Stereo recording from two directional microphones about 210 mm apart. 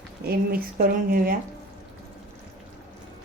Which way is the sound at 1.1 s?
45° right (ahead or behind).